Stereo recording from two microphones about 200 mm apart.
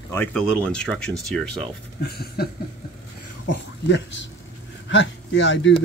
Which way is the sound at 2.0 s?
50° left (ahead or behind).